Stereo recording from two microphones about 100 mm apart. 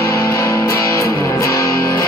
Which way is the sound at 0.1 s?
30° left (ahead or behind).